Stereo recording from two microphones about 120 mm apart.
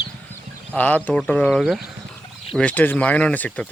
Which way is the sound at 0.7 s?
10° left (ahead or behind).